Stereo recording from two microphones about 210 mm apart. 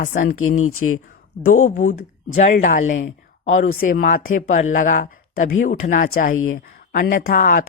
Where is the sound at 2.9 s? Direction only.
65° left (ahead or behind).